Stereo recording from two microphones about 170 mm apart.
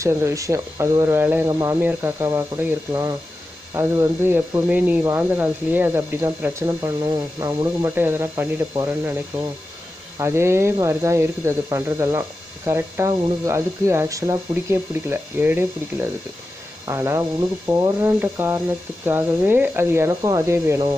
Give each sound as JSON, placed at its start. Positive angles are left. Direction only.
{"t": 0.0, "sound": "speech", "side_deg": -15}